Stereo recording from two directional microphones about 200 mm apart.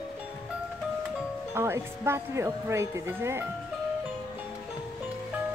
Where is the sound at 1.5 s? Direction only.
10° right (ahead or behind).